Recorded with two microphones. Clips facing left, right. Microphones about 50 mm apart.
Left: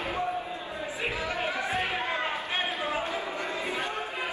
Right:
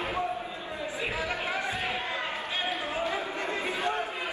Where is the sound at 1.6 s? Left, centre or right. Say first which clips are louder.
Left 2 dB; left.